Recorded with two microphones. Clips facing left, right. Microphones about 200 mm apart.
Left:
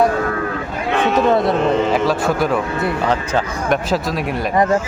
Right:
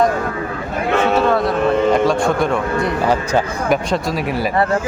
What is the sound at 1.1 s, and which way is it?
Speech, 25° left (ahead or behind).